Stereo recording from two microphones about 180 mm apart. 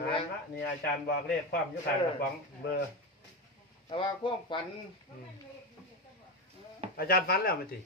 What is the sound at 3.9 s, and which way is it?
Speech, 25° left (ahead or behind).